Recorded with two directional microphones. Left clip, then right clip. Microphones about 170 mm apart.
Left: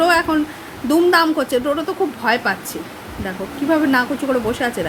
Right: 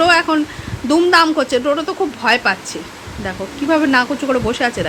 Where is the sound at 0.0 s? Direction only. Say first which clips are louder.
Right 3 dB; 15° right (ahead or behind).